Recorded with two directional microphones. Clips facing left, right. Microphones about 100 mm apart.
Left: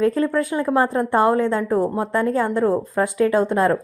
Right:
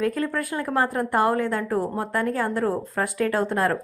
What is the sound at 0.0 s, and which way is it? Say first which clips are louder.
A woman's voice: left 6 dB; 25° left (ahead or behind).